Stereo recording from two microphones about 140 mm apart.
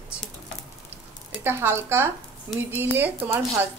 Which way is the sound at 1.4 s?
15° right (ahead or behind).